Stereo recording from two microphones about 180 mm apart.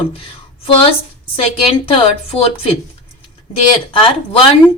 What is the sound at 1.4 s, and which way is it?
Speech, 30° left (ahead or behind).